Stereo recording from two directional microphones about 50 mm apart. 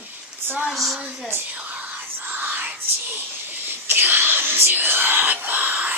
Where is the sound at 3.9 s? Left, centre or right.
Right.